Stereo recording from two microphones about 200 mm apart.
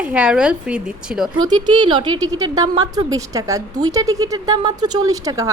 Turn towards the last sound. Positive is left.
turn(degrees=-15)  # may be behind; listen again after turning